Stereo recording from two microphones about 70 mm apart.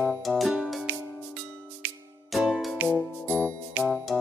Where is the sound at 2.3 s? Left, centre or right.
Centre.